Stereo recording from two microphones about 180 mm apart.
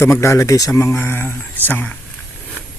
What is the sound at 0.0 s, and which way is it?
Speech, 15° left (ahead or behind).